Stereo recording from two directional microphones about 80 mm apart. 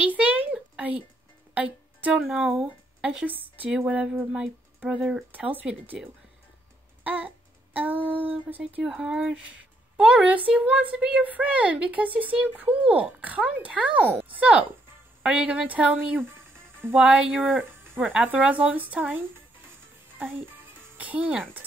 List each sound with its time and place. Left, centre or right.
0.0 s a sound: centre
1.5 s music: centre
2.1 s speech: centre
3.3 s speech: right
3.7 s speech: centre
5.3 s speech: right
7.0 s a sound: right
8.8 s speech: centre; by 16.9 s right
16.9 s speech: centre
20.2 s music: right